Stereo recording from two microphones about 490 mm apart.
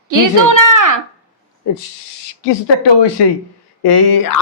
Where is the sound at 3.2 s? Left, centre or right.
Left.